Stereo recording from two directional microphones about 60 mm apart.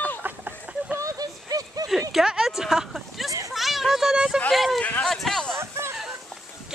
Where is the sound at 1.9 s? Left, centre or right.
Centre.